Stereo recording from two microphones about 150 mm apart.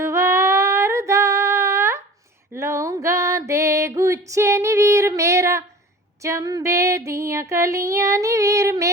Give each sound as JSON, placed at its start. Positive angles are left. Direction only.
{"t": 0.0, "sound": "female singing", "side_deg": -15}
{"t": 2.6, "sound": "music", "side_deg": -20}
{"t": 6.2, "sound": "female singing", "side_deg": -20}